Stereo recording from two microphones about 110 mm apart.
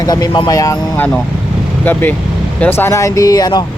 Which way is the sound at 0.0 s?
40° left (ahead or behind).